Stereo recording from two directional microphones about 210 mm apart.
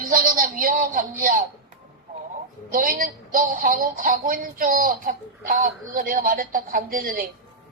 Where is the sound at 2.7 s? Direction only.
40° right (ahead or behind).